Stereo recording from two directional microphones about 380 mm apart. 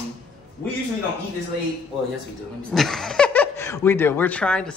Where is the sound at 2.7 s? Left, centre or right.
Centre.